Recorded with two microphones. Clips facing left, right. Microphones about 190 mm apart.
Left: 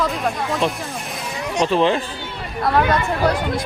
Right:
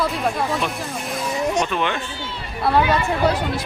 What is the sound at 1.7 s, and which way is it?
Speech, 30° left (ahead or behind).